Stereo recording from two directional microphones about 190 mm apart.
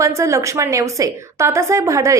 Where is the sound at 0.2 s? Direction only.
15° right (ahead or behind).